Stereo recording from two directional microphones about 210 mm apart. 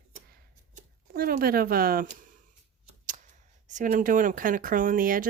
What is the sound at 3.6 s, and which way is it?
Speech, 40° right (ahead or behind).